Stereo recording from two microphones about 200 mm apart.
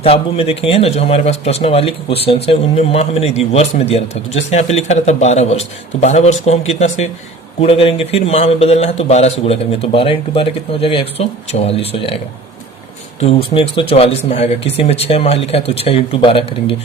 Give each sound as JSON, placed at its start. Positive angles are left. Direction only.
{"t": 0.0, "sound": "speech", "side_deg": 30}